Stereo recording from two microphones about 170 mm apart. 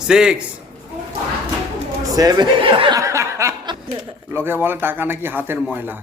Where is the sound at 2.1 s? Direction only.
20° right (ahead or behind).